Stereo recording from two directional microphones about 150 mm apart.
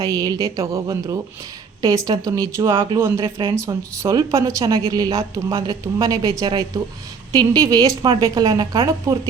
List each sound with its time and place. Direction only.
0.0 s speech: 25° right (ahead or behind)